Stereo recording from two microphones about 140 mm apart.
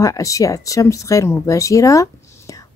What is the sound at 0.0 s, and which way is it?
A woman's voice, 25° left (ahead or behind).